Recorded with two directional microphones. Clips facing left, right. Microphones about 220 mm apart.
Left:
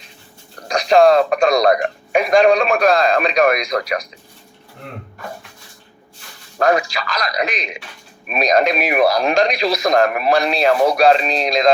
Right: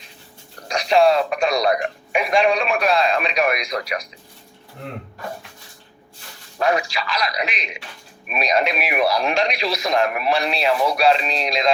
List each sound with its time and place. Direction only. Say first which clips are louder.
0.7 s speech: left 4 dB; 45° left (ahead or behind)
6.6 s speech: left 4 dB; 45° left (ahead or behind)